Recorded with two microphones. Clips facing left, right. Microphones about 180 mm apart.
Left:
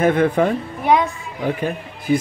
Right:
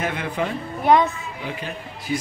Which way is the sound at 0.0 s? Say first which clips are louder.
Left 10 dB; 50° left (ahead or behind).